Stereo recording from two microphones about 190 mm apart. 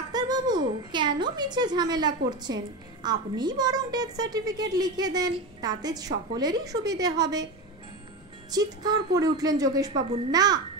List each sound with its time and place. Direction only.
0.1 s a woman's voice: 20° right (ahead or behind)
8.5 s a woman's voice: 20° right (ahead or behind)